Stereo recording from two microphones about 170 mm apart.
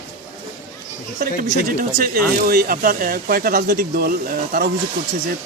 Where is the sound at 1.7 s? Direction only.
60° right (ahead or behind).